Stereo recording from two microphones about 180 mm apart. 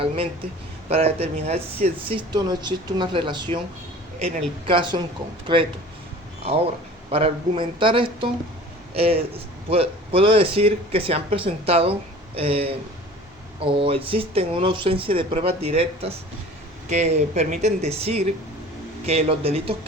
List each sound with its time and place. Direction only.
0.9 s speech: 35° right (ahead or behind)
7.1 s a man's voice: 30° right (ahead or behind)